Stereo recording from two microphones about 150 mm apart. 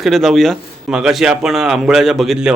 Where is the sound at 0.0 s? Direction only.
Centre (ahead or behind).